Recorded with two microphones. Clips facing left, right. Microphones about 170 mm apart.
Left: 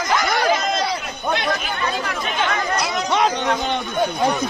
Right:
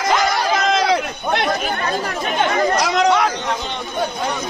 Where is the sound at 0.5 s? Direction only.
90° right.